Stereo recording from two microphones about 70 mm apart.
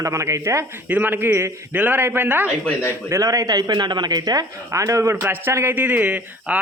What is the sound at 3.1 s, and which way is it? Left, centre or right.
Speech, right.